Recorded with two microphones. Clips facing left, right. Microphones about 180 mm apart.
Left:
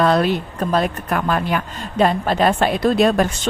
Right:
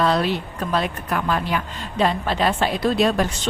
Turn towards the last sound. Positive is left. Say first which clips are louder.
# left 4 dB
turn(degrees=50)  # may be behind; listen again after turning